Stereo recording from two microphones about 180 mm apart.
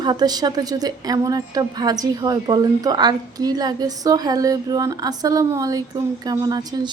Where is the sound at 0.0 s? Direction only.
25° right (ahead or behind).